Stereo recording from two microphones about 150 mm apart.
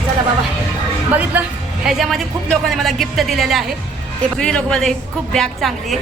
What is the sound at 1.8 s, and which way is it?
A woman's voice, centre (ahead or behind).